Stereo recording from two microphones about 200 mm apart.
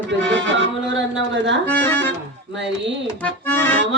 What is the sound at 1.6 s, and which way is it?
Speech, 10° left (ahead or behind).